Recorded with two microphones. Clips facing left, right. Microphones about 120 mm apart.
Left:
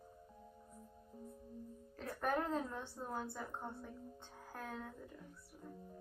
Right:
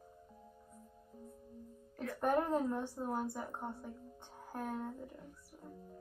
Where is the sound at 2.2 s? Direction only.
20° right (ahead or behind).